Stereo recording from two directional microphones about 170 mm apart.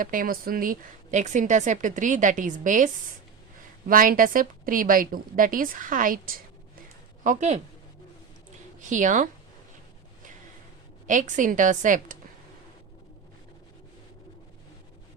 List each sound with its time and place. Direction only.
0.0 s a woman's voice: 55° right (ahead or behind)
7.3 s a woman's voice: 45° right (ahead or behind)
8.8 s a woman's voice: 50° right (ahead or behind)
11.0 s a woman's voice: 50° right (ahead or behind)